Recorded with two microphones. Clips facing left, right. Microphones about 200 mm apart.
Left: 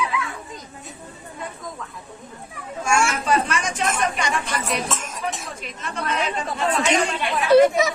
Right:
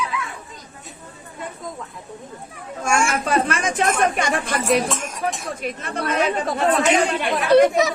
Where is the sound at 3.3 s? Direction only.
55° right (ahead or behind).